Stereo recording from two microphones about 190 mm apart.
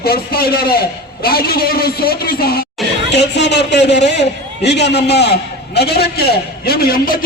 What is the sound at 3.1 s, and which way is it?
A man's voice, 65° left (ahead or behind).